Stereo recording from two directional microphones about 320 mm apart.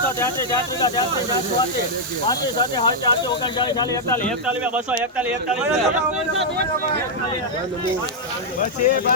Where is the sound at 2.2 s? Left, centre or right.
Centre.